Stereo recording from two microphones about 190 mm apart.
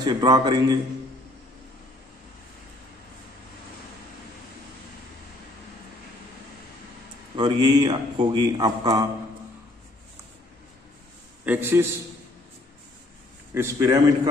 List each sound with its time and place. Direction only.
0.0 s speech: 25° right (ahead or behind)
7.3 s speech: 20° right (ahead or behind)
11.4 s a man's voice: 10° right (ahead or behind)
13.5 s a man's voice: 10° right (ahead or behind)